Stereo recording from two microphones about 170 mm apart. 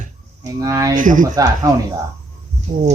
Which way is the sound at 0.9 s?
50° right (ahead or behind).